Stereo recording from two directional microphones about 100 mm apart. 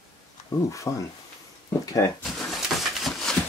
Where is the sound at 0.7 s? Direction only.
30° left (ahead or behind).